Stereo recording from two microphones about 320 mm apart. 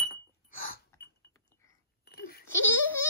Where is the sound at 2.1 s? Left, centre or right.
Left.